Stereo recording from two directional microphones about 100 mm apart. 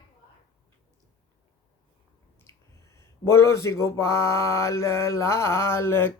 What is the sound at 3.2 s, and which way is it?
Mantra, 30° left (ahead or behind).